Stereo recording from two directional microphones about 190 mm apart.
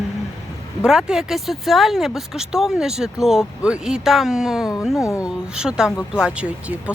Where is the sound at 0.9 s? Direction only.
Centre (ahead or behind).